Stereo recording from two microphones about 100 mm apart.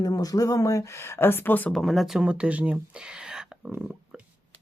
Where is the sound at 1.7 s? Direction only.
Centre (ahead or behind).